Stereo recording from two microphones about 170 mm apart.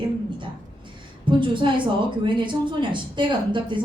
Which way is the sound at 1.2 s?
30° right (ahead or behind).